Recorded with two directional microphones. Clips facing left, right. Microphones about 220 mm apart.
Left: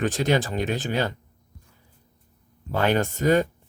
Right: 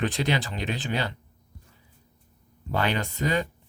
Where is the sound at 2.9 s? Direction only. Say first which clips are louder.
Left 10 dB; 45° left (ahead or behind).